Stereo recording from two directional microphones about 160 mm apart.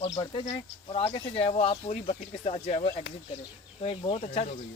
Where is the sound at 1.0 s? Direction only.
35° left (ahead or behind).